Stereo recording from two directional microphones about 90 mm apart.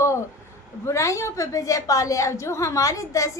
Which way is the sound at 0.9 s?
35° left (ahead or behind).